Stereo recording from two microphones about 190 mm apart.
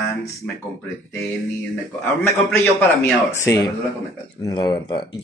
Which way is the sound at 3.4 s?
15° left (ahead or behind).